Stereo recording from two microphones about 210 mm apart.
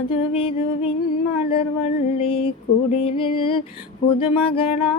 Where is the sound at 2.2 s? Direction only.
25° left (ahead or behind).